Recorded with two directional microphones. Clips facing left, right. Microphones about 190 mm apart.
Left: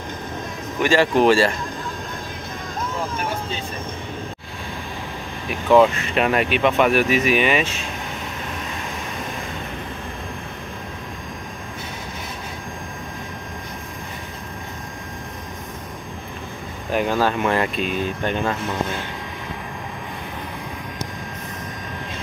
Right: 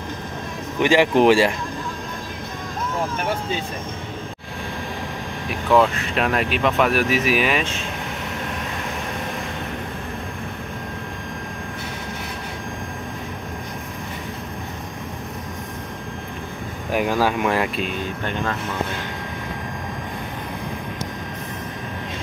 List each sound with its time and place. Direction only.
0.7 s speech: 15° right (ahead or behind)
5.5 s speech: centre (ahead or behind)
16.9 s speech: 10° right (ahead or behind)